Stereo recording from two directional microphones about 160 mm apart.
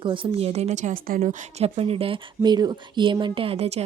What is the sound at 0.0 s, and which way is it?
Speech, 30° right (ahead or behind).